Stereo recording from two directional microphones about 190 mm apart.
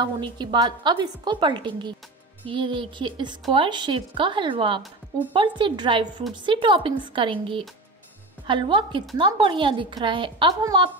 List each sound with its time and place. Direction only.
0.0 s a woman's voice: 25° right (ahead or behind)